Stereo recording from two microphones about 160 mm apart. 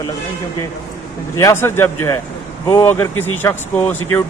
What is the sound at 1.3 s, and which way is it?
A man's voice, 15° left (ahead or behind).